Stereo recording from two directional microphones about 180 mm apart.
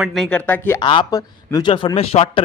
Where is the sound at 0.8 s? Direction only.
25° left (ahead or behind).